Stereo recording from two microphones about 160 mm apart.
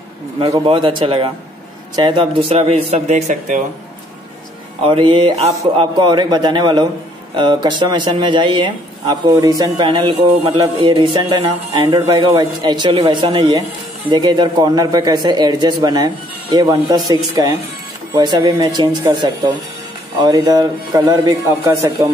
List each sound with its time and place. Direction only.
0.4 s a man's voice: 35° right (ahead or behind)
4.8 s a man's voice: 30° right (ahead or behind)